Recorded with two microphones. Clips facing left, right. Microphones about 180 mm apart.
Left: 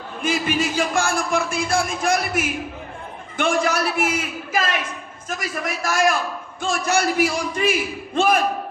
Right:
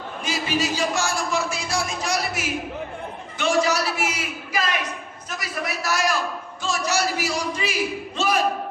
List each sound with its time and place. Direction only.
0.2 s speech: 55° left (ahead or behind)